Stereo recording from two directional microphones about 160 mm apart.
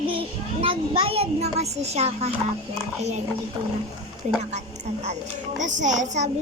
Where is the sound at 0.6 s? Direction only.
35° right (ahead or behind).